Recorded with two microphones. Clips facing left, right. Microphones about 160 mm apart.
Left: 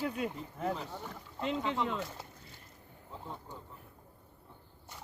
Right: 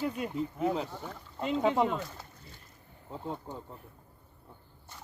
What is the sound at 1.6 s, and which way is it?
Speech, 45° right (ahead or behind).